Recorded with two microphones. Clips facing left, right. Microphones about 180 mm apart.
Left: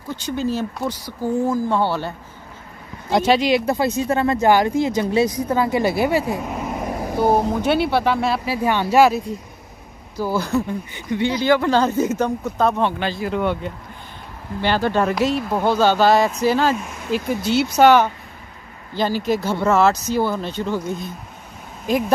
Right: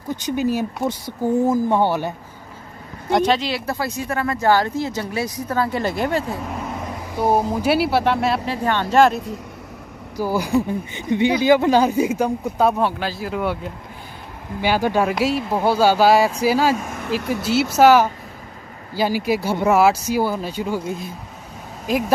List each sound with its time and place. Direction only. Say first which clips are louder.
0.1 s speech: right 2 dB; 15° right (ahead or behind)
3.1 s speech: left 2 dB; 5° left (ahead or behind)
7.2 s speech: even; 5° right (ahead or behind)
10.1 s speech: right 1 dB; 15° right (ahead or behind)